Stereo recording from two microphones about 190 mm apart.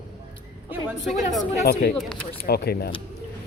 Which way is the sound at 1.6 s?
60° left (ahead or behind).